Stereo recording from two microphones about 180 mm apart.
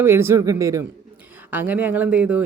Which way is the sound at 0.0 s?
15° right (ahead or behind).